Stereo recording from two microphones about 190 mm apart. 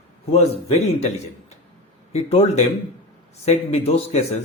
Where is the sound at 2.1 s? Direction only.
35° left (ahead or behind).